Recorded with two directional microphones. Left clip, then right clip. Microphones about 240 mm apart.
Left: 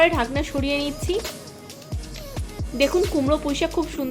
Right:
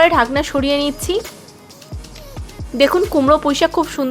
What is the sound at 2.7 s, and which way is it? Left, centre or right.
Speech, right.